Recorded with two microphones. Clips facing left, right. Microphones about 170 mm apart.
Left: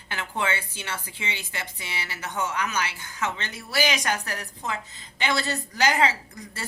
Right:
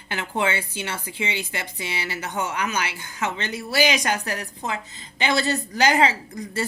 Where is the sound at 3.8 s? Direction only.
15° right (ahead or behind).